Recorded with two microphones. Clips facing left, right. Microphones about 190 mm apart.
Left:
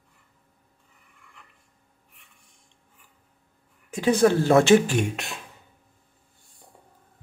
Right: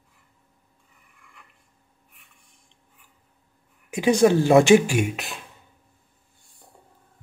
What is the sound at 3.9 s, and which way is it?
Speech, 15° right (ahead or behind).